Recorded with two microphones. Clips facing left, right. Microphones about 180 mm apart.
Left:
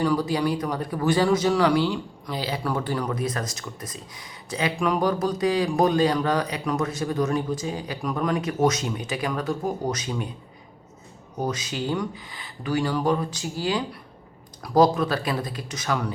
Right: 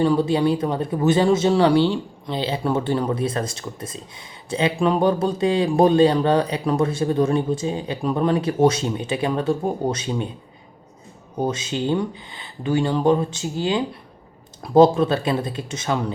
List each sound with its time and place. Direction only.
0.0 s speech: 25° right (ahead or behind)
11.3 s speech: 25° right (ahead or behind)